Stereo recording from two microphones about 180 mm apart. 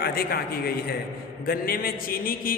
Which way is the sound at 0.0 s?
60° left (ahead or behind).